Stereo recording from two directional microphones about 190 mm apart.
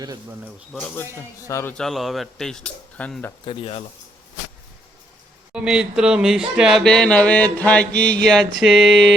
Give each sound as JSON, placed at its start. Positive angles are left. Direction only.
{"t": 0.0, "sound": "speech", "side_deg": -20}
{"t": 1.4, "sound": "a man's voice", "side_deg": 15}
{"t": 1.7, "sound": "mantra", "side_deg": 0}
{"t": 3.4, "sound": "speech", "side_deg": 30}
{"t": 5.5, "sound": "mantra", "side_deg": -5}